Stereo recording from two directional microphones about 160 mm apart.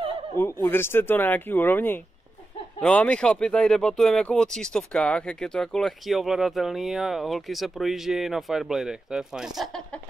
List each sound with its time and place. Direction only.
0.4 s speech: 15° left (ahead or behind); by 9.7 s 5° right (ahead or behind)